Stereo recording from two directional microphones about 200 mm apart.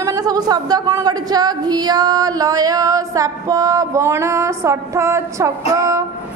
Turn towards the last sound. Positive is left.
turn(degrees=-15)  # may be behind; listen again after turning